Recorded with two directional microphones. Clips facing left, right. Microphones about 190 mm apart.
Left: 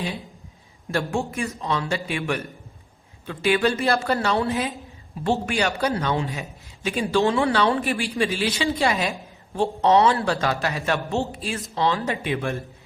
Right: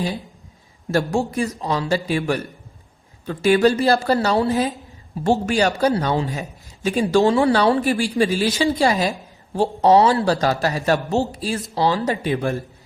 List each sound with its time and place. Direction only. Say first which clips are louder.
0.9 s speech: right 5 dB; 40° right (ahead or behind)